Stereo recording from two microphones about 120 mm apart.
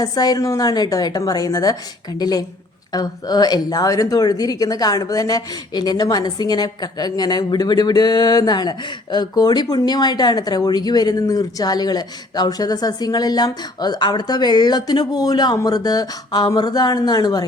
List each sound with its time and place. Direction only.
0.0 s speech: 30° left (ahead or behind)